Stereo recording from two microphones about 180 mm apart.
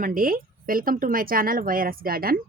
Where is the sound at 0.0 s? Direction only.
50° right (ahead or behind).